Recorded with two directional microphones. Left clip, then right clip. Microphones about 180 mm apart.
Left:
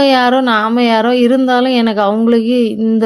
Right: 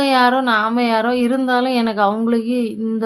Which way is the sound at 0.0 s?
35° left (ahead or behind).